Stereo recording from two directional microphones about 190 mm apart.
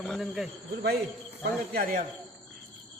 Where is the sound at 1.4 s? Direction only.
50° right (ahead or behind).